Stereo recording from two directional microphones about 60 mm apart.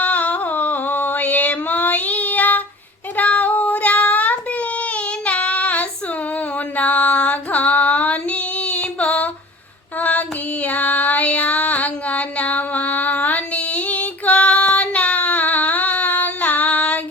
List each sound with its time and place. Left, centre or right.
0.0 s a sound: left
3.2 s child singing: left
6.7 s female singing: left